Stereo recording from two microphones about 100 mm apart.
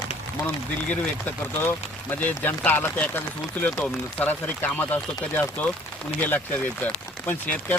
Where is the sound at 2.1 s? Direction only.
20° left (ahead or behind).